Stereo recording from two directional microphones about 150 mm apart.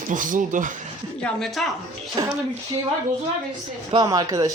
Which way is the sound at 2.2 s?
30° right (ahead or behind).